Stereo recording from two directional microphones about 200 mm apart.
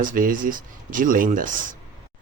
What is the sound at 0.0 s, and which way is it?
Speech, 45° right (ahead or behind).